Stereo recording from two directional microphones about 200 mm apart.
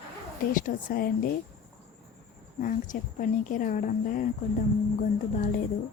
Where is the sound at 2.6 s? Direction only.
40° left (ahead or behind).